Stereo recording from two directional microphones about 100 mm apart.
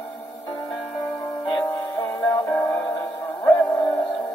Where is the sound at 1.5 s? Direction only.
40° left (ahead or behind).